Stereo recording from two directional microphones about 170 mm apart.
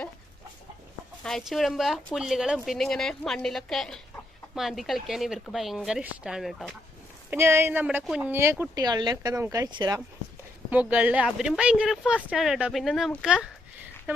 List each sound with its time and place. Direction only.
1.2 s speech: centre (ahead or behind)
7.3 s speech: 15° right (ahead or behind)
10.7 s speech: 10° right (ahead or behind)